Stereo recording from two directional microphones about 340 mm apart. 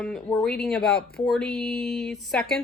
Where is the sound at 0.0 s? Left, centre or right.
Centre.